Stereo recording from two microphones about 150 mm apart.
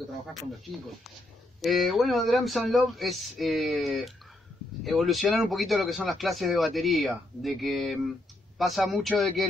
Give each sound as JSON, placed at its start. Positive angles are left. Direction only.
{"t": 0.3, "sound": "speech", "side_deg": 0}